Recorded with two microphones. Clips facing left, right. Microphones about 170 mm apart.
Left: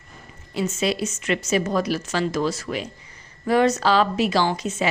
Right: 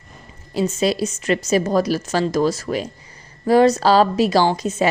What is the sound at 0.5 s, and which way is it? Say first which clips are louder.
A woman's voice: right 4 dB; 35° right (ahead or behind).